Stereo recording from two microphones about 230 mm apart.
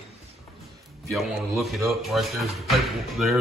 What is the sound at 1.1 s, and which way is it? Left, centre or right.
Speech, centre.